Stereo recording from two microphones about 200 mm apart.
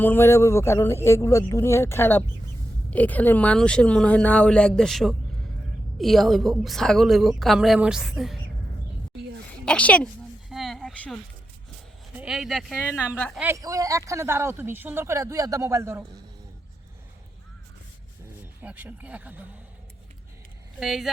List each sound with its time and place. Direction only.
0.0 s a woman's voice: 10° left (ahead or behind)
9.6 s a woman's voice: 5° left (ahead or behind)
10.5 s a sound: centre (ahead or behind)
12.1 s a woman's voice: 5° right (ahead or behind)
13.4 s speech: 15° right (ahead or behind)
18.6 s speech: 10° right (ahead or behind)
20.7 s a woman's voice: centre (ahead or behind)